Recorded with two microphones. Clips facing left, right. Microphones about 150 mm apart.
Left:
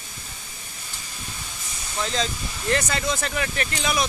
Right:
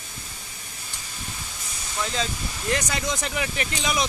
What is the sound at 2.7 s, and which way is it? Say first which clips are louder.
Speech: left 2 dB; 15° right (ahead or behind).